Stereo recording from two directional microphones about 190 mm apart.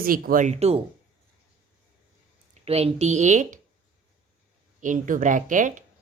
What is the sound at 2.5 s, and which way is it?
Speech, 30° right (ahead or behind).